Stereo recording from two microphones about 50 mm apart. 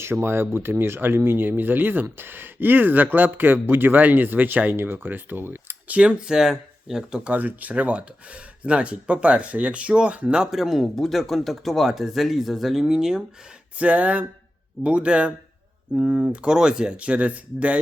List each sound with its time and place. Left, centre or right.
0.0 s speech: right
5.9 s speech: centre
7.3 s speech: right
10.5 s speech: centre
13.7 s speech: right
16.0 s speech: right
16.4 s speech: centre